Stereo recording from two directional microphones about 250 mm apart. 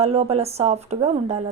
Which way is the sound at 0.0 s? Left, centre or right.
Right.